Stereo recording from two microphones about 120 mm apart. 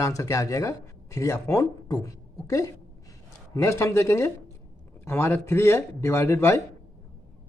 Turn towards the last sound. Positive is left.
turn(degrees=20)  # may be behind; listen again after turning